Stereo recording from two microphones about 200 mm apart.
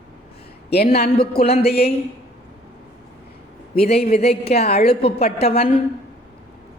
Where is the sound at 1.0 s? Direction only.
50° left (ahead or behind).